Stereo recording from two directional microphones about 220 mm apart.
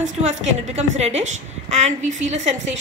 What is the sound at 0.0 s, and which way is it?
A woman's voice, 30° right (ahead or behind).